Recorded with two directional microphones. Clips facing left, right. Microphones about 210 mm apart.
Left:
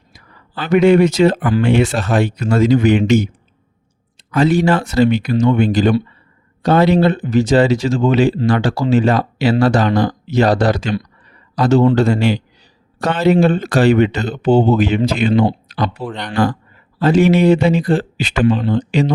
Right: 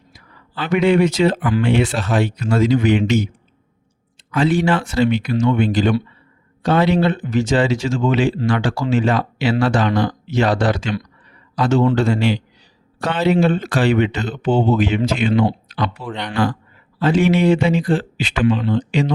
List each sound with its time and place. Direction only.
0.5 s speech: 45° left (ahead or behind)
4.3 s speech: 40° left (ahead or behind)